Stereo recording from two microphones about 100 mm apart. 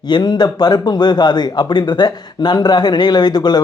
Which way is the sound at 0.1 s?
45° left (ahead or behind).